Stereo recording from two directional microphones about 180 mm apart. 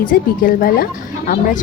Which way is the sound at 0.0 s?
50° left (ahead or behind).